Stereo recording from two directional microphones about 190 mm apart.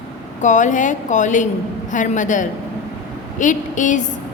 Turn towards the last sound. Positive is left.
turn(degrees=40)  # may be behind; listen again after turning